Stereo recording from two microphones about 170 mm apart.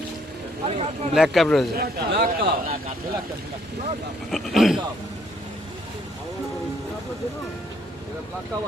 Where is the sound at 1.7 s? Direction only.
65° right (ahead or behind).